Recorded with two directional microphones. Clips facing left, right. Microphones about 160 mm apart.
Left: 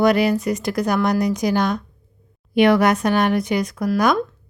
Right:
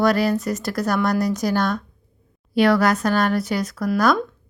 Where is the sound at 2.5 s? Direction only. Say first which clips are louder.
Left 2 dB; 20° left (ahead or behind).